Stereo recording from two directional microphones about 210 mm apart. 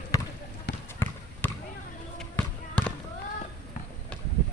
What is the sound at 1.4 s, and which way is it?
Basketball bounce, 10° left (ahead or behind).